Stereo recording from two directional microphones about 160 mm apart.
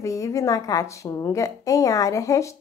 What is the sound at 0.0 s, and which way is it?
A woman's voice, 20° left (ahead or behind).